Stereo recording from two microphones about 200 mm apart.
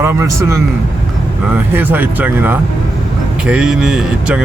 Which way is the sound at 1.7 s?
10° right (ahead or behind).